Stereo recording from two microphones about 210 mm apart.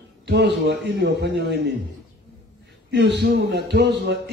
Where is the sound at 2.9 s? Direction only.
55° right (ahead or behind).